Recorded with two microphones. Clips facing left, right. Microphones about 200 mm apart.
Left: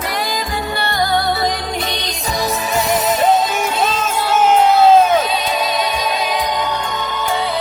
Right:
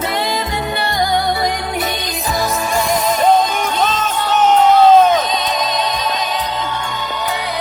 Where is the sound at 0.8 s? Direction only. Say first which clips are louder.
Even; 15° right (ahead or behind); by 6.4 s 10° left (ahead or behind).